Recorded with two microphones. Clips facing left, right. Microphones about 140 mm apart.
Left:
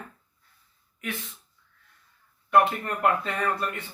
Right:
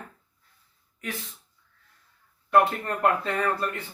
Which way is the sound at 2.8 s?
30° right (ahead or behind).